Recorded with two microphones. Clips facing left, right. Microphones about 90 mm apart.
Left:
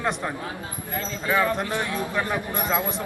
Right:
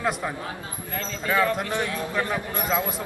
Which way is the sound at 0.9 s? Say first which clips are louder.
Left 1 dB; 20° left (ahead or behind).